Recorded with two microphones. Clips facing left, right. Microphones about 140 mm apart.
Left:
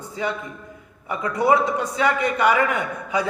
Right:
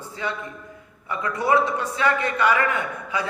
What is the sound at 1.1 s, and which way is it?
A man's voice, 15° left (ahead or behind).